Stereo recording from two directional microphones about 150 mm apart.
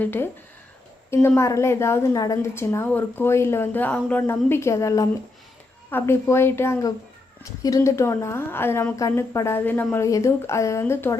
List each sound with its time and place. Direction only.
0.0 s a woman's voice: 15° left (ahead or behind)
1.4 s a woman's voice: 20° left (ahead or behind)